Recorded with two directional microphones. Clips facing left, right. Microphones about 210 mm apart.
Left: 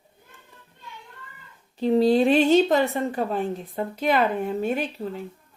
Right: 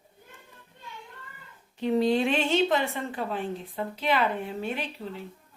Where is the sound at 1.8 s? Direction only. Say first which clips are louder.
Left 5 dB; 35° left (ahead or behind).